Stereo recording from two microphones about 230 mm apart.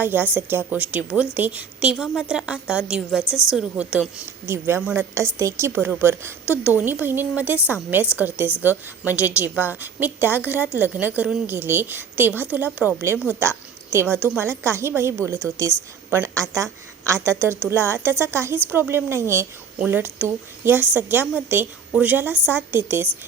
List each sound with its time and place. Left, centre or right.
0.0 s a woman's voice: centre
3.2 s a woman's voice: centre
3.5 s a woman's voice: centre